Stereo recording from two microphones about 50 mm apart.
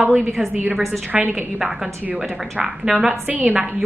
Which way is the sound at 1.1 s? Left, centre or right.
Right.